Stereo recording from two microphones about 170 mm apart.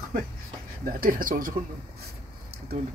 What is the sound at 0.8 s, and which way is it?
Speech, 55° right (ahead or behind).